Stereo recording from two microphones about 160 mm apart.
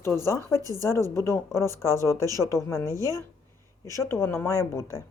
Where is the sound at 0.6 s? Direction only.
20° right (ahead or behind).